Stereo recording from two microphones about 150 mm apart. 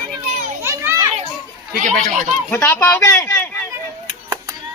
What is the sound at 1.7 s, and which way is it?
Speech, 60° right (ahead or behind).